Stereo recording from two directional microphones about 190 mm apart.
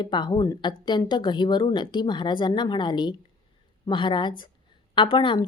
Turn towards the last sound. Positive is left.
turn(degrees=25)  # may be behind; listen again after turning